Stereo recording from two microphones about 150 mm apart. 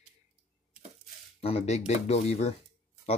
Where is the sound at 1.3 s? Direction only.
40° left (ahead or behind).